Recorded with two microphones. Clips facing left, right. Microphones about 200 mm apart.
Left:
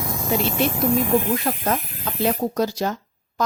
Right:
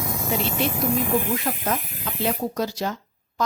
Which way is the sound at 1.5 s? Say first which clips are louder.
Left 3 dB; 45° left (ahead or behind).